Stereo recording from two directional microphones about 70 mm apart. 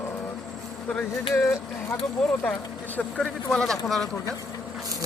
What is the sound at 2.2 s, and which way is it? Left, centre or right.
Speech, centre.